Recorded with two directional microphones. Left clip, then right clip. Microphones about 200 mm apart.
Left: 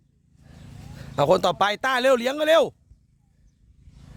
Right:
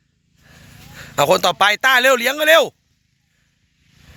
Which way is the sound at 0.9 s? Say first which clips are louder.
Right 5 dB; centre (ahead or behind).